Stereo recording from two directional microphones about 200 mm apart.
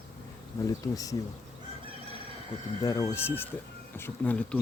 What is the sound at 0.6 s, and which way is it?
Speech, 15° left (ahead or behind).